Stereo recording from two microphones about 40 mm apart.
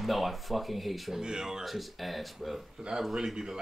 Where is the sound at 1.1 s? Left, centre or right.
Centre.